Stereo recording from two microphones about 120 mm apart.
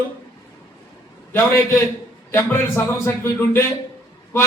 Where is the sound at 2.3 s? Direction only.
20° left (ahead or behind).